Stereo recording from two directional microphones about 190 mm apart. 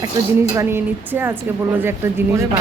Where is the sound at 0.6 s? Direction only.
10° right (ahead or behind).